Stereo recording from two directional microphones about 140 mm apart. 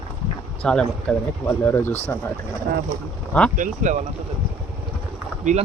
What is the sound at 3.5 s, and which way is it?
Speech, 65° right (ahead or behind).